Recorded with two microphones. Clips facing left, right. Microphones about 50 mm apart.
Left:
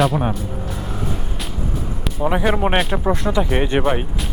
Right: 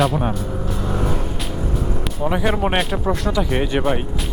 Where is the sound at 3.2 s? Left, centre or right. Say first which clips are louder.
Left 1 dB; left.